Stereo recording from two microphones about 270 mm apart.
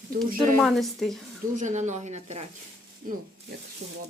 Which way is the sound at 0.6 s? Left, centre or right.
Centre.